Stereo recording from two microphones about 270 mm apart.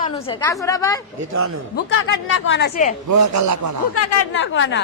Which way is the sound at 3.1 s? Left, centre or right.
Right.